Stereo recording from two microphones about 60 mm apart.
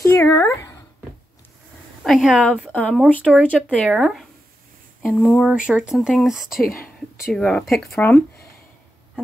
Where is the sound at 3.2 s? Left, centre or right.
Right.